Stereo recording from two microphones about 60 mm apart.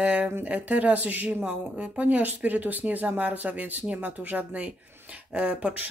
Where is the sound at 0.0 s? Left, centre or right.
Right.